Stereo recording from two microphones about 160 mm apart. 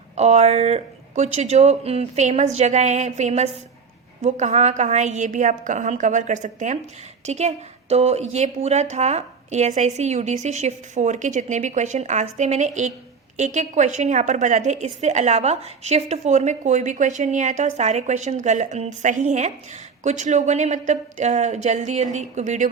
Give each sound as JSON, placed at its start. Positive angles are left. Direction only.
{"t": 0.2, "sound": "a woman's voice", "side_deg": -45}